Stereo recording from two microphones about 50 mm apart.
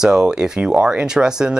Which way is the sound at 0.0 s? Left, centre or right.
Centre.